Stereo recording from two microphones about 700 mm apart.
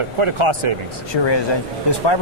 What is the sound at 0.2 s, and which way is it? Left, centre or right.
Speech, right.